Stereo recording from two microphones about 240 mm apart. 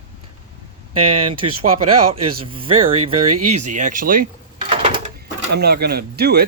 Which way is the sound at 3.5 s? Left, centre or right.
Right.